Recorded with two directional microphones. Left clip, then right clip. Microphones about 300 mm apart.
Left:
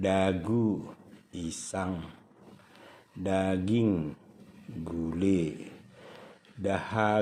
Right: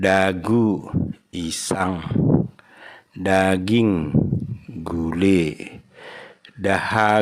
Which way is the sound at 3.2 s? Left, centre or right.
Right.